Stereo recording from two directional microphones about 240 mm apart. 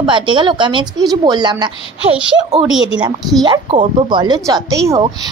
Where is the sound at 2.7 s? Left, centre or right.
Centre.